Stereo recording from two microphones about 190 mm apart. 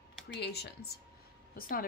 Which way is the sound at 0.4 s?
60° left (ahead or behind).